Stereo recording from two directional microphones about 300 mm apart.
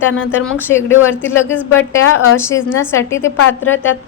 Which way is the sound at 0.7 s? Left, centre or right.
Centre.